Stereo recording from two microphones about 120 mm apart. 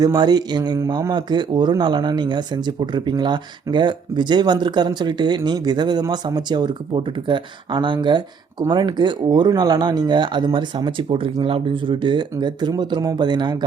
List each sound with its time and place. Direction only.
0.0 s speech: 35° right (ahead or behind)